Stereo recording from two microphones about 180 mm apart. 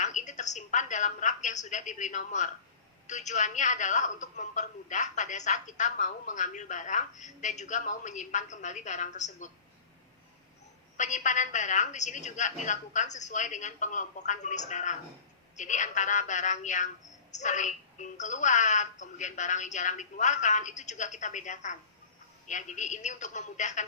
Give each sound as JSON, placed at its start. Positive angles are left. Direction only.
{"t": 0.0, "sound": "a woman's voice", "side_deg": 40}
{"t": 10.9, "sound": "a woman's voice", "side_deg": 40}